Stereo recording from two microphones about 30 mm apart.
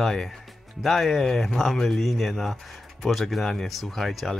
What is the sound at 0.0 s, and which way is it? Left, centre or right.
Speech, centre.